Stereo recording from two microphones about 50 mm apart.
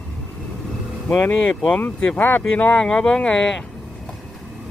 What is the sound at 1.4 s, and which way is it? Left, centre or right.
Speech, left.